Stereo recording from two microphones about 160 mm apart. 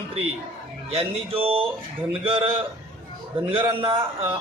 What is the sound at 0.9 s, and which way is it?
A man's voice, 35° right (ahead or behind).